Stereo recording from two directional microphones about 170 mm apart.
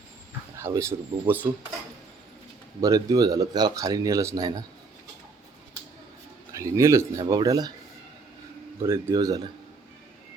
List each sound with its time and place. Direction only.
0.5 s speech: 15° right (ahead or behind)
2.8 s speech: 20° right (ahead or behind)
6.5 s speech: 15° right (ahead or behind)
8.8 s speech: 15° right (ahead or behind)